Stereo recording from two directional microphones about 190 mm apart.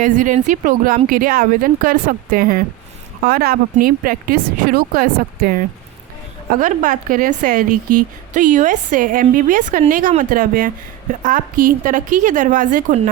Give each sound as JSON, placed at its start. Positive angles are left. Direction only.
{"t": 0.0, "sound": "speech", "side_deg": -45}